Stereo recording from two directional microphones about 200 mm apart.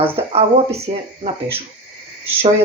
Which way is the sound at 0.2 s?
30° right (ahead or behind).